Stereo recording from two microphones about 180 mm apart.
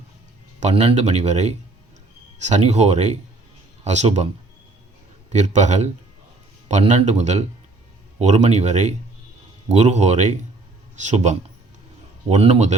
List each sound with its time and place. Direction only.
0.6 s speech: 35° right (ahead or behind)
5.3 s speech: 40° right (ahead or behind)